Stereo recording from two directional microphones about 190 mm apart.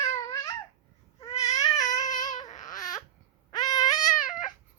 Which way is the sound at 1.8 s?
40° left (ahead or behind).